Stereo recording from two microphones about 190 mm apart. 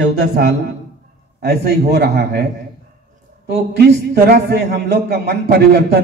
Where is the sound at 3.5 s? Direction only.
60° right (ahead or behind).